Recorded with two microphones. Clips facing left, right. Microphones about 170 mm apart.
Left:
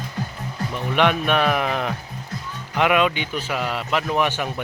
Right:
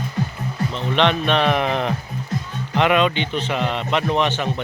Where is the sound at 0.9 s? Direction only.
10° left (ahead or behind).